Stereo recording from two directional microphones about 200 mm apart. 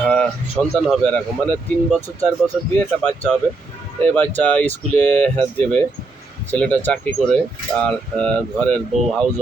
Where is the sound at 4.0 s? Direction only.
10° left (ahead or behind).